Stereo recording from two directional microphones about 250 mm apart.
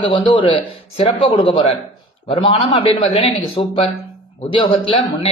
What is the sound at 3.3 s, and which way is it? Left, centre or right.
A man's voice, left.